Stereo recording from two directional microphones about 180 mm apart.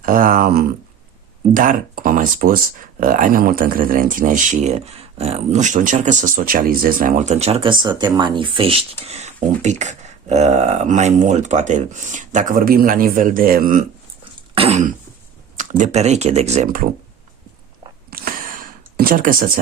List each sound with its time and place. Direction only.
0.0 s speech: 50° right (ahead or behind)
14.5 s throat clearing: 35° right (ahead or behind)
15.5 s speech: 40° right (ahead or behind)
18.1 s a sound: 50° right (ahead or behind)